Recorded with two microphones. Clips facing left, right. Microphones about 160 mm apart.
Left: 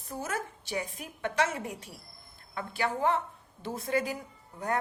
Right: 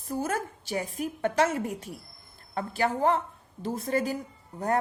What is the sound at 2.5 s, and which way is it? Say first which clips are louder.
A woman's voice: right 4 dB; 35° right (ahead or behind).